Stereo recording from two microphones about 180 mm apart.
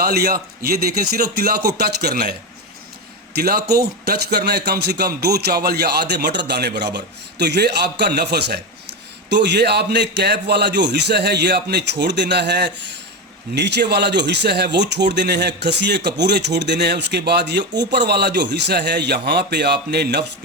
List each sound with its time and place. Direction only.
0.0 s speech: 60° right (ahead or behind)
3.3 s a man's voice: 60° right (ahead or behind)